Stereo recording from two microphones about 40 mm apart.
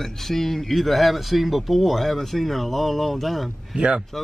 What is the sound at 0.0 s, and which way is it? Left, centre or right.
Speech, centre.